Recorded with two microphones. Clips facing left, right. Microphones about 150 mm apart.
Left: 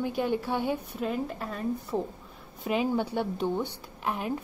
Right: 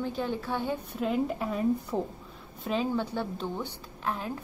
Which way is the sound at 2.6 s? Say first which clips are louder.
Left 2 dB; 10° left (ahead or behind).